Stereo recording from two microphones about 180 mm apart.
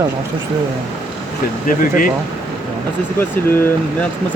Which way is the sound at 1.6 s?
50° left (ahead or behind).